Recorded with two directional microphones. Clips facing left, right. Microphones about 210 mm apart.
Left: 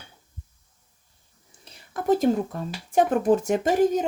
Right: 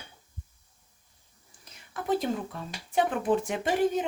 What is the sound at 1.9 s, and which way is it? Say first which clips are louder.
Speech: left 7 dB; 45° left (ahead or behind).